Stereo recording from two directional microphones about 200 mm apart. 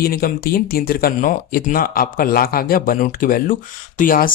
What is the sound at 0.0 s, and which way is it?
Speech, 50° left (ahead or behind).